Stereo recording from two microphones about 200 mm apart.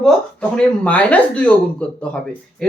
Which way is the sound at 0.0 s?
5° left (ahead or behind).